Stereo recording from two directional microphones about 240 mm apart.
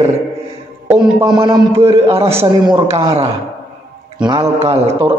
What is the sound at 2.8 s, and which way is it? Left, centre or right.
A man's voice, right.